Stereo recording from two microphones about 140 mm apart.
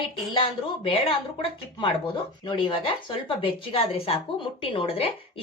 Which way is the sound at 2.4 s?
35° left (ahead or behind).